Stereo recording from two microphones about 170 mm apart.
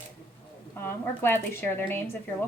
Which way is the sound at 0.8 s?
15° left (ahead or behind).